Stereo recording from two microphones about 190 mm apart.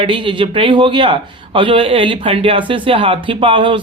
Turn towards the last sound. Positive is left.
turn(degrees=-25)  # may be behind; listen again after turning